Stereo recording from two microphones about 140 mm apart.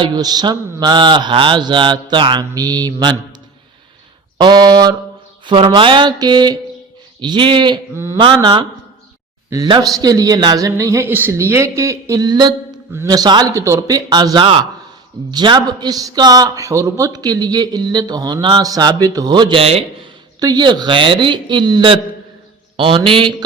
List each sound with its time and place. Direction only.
0.0 s mantra: 30° right (ahead or behind)
4.4 s a man's voice: 30° right (ahead or behind)
5.5 s mantra: 35° right (ahead or behind)
7.9 s mantra: 20° right (ahead or behind)
8.2 s mantra: 35° right (ahead or behind)
9.5 s a man's voice: 30° right (ahead or behind)
20.4 s mantra: 30° right (ahead or behind)